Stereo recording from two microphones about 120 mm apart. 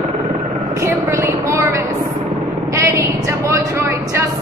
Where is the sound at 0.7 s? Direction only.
25° right (ahead or behind).